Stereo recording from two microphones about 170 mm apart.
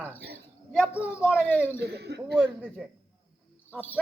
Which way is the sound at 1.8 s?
75° right (ahead or behind).